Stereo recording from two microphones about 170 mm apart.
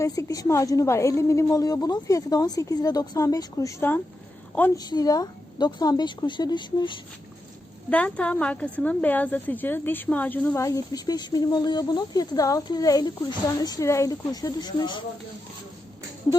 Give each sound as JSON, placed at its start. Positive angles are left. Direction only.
{"t": 0.0, "sound": "a woman's voice", "side_deg": 20}
{"t": 4.8, "sound": "a woman's voice", "side_deg": 25}
{"t": 7.9, "sound": "a woman's voice", "side_deg": 10}